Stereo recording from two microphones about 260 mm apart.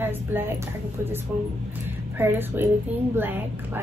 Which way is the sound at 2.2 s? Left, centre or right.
Centre.